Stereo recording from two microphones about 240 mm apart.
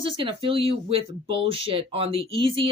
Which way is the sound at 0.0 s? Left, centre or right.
Right.